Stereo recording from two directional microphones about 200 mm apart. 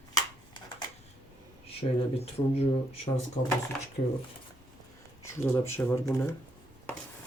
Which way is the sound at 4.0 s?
40° left (ahead or behind).